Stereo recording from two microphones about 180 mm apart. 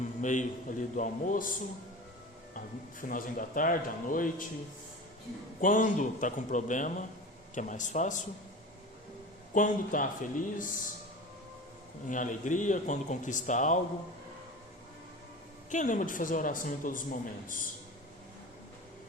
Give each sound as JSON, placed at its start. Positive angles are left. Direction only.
{"t": 0.2, "sound": "speech", "side_deg": 45}
{"t": 3.0, "sound": "speech", "side_deg": 50}
{"t": 5.5, "sound": "speech", "side_deg": 45}
{"t": 9.6, "sound": "speech", "side_deg": 45}
{"t": 12.0, "sound": "speech", "side_deg": 45}
{"t": 15.7, "sound": "speech", "side_deg": 45}